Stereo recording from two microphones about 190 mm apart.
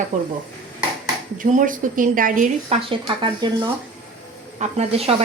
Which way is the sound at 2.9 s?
25° right (ahead or behind).